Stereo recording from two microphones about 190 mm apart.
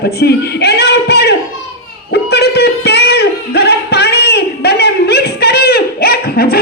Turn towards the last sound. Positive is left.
turn(degrees=55)  # may be behind; listen again after turning